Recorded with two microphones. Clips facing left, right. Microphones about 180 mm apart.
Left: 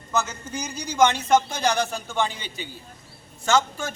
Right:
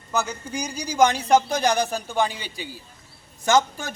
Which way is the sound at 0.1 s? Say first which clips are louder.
Right 1 dB; 10° right (ahead or behind).